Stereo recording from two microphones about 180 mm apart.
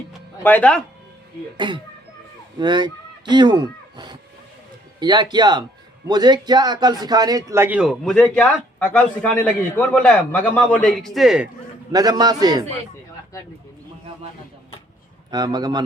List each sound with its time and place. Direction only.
0.4 s speech: 10° left (ahead or behind)
1.5 s a man's voice: 25° right (ahead or behind); by 11.4 s centre (ahead or behind)
11.9 s a man's voice: 20° right (ahead or behind)
15.3 s a man's voice: 20° right (ahead or behind)